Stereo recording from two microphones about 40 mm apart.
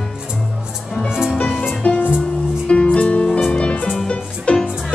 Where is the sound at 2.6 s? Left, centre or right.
Left.